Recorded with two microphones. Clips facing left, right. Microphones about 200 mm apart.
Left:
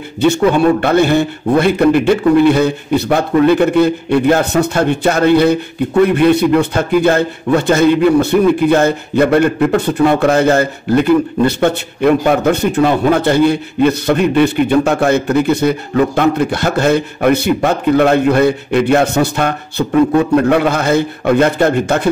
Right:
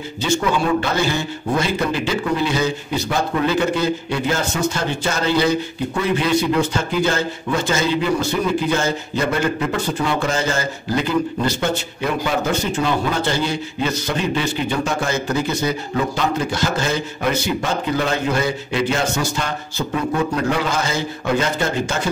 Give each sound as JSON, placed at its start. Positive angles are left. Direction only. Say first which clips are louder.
{"t": 0.2, "sound": "a man's voice", "louder": "left 9 dB", "side_deg": 60}